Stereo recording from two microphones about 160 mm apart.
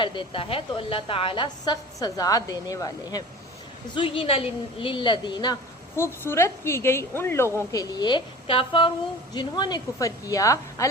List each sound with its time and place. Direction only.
0.0 s a woman's voice: 30° left (ahead or behind)
3.9 s a woman's voice: 35° left (ahead or behind)
6.0 s a woman's voice: 15° left (ahead or behind)